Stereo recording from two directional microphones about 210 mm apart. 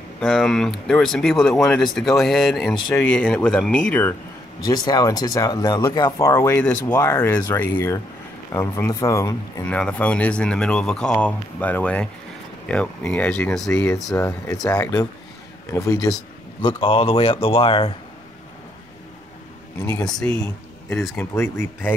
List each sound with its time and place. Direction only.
0.2 s speech: centre (ahead or behind)
4.6 s speech: 20° left (ahead or behind); by 14.1 s centre (ahead or behind)
14.1 s speech: 15° left (ahead or behind)
16.6 s speech: 25° left (ahead or behind)
21.2 s speech: 10° left (ahead or behind)